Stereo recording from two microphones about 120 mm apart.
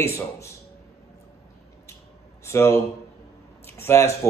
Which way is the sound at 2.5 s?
20° left (ahead or behind).